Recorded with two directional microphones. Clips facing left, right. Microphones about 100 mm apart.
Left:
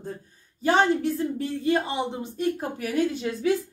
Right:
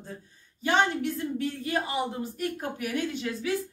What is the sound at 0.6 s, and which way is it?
Speech, 40° left (ahead or behind).